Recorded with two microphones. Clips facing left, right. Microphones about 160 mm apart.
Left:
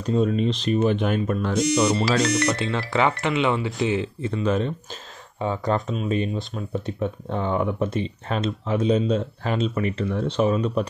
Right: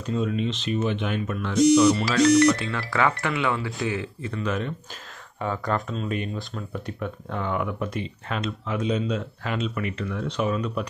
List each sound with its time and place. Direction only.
0.0 s speech: 35° left (ahead or behind)
2.5 s speech: 25° left (ahead or behind)